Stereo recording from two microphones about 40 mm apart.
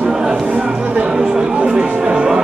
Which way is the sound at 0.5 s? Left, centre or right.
Right.